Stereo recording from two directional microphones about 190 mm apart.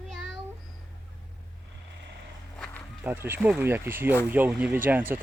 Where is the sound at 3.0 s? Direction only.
10° right (ahead or behind).